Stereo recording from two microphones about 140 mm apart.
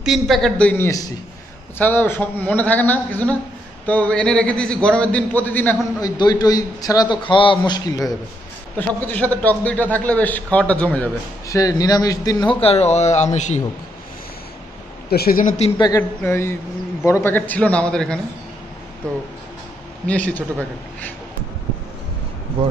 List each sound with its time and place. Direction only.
0.0 s a man's voice: centre (ahead or behind)
5.9 s a man's voice: 30° left (ahead or behind)
8.7 s a man's voice: 10° left (ahead or behind)
11.4 s a man's voice: 25° left (ahead or behind)
12.5 s speech: 45° left (ahead or behind)
15.0 s a woman's voice: 90° left
16.0 s a man's voice: 20° left (ahead or behind)
20.1 s a man's voice: 10° left (ahead or behind)